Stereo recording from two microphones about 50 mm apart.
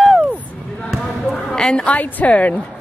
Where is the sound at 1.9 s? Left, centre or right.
Left.